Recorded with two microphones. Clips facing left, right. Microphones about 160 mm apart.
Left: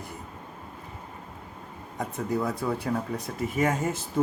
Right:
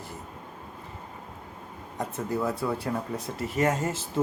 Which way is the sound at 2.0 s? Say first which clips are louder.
Left 1 dB; centre (ahead or behind).